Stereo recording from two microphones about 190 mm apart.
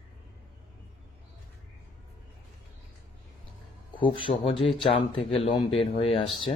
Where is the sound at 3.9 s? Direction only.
25° left (ahead or behind).